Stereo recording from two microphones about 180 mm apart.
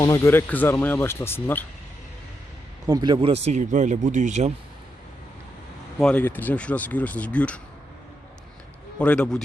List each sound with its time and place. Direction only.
0.0 s speech: 15° left (ahead or behind)
2.8 s speech: 20° right (ahead or behind); by 4.5 s 40° right (ahead or behind)
6.0 s speech: 5° left (ahead or behind)
9.0 s a man's voice: 5° left (ahead or behind)